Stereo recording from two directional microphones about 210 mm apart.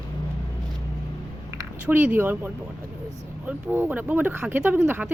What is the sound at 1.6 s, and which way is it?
Speech, 10° right (ahead or behind).